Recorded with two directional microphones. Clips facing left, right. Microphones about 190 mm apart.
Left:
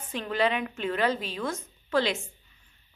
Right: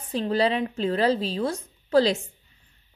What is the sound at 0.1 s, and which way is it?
A woman's voice, 35° right (ahead or behind).